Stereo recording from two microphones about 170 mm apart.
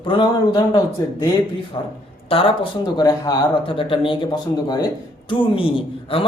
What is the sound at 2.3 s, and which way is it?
Speech, 35° left (ahead or behind).